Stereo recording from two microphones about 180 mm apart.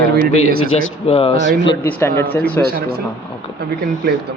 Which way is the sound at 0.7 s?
35° left (ahead or behind).